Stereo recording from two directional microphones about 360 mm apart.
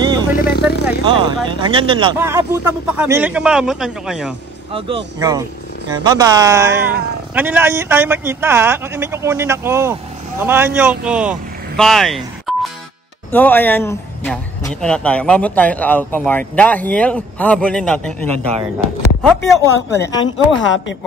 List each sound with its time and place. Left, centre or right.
0.0 s vehicle: centre
0.4 s speech: left
0.8 s speech: centre
4.7 s speech: centre
20.6 s speech: left